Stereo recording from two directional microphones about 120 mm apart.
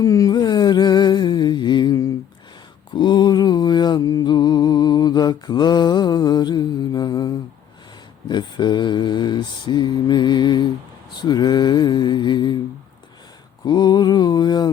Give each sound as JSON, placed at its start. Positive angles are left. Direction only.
{"t": 0.0, "sound": "a sound", "side_deg": 30}
{"t": 2.9, "sound": "mantra", "side_deg": 40}
{"t": 13.7, "sound": "mantra", "side_deg": 35}